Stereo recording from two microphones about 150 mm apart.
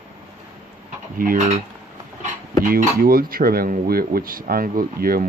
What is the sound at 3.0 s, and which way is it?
Speech, 75° right (ahead or behind).